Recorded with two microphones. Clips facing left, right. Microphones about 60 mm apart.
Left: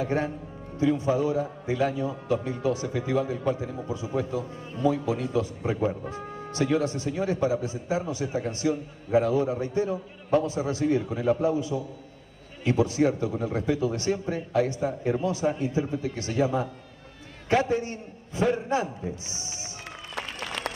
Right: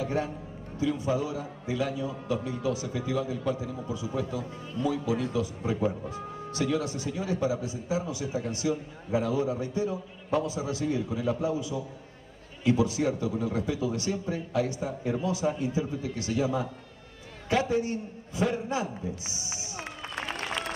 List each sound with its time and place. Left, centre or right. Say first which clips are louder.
0.0 s a man's voice: left 3 dB; left